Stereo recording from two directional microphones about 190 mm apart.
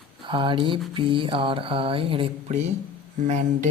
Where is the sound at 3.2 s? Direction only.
40° right (ahead or behind).